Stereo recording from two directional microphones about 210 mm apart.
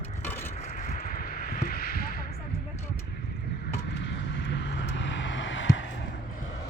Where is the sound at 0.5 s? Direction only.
40° left (ahead or behind).